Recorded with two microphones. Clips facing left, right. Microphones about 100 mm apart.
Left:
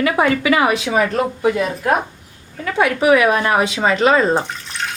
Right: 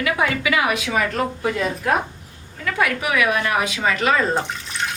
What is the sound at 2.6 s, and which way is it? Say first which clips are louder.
A woman's voice: left 6 dB; 30° left (ahead or behind).